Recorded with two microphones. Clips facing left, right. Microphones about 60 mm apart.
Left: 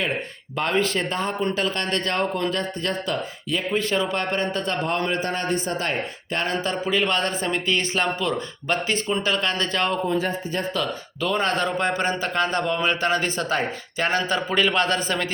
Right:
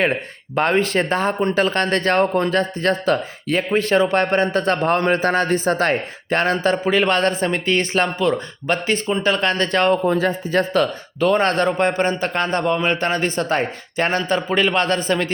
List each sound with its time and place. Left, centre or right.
0.5 s a man's voice: right
2.5 s a man's voice: right
10.1 s speech: right
10.8 s a man's voice: right
11.3 s speech: right
12.6 s a man's voice: right
12.9 s a man's voice: right